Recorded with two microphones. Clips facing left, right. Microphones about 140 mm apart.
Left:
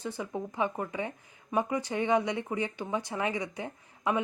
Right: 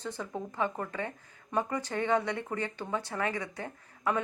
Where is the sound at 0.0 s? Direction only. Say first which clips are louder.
Left 2 dB; 10° left (ahead or behind).